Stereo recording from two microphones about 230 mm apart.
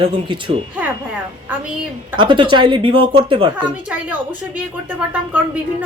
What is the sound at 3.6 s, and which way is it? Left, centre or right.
A woman's voice, centre.